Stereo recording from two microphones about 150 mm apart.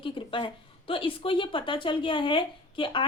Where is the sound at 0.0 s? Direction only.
35° left (ahead or behind).